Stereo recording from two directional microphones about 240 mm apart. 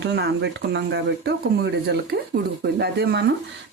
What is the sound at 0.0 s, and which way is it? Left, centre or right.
Speech, right.